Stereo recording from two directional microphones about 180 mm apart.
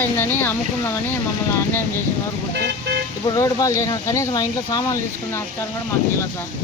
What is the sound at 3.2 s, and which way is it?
Speech, 20° left (ahead or behind).